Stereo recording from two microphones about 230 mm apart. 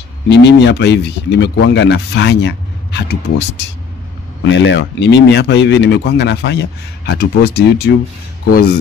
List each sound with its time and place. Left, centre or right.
0.3 s speech: left
4.5 s speech: left